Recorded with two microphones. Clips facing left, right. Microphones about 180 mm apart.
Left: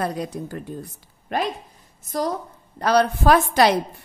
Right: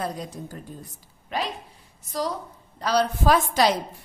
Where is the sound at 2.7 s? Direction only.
60° left (ahead or behind).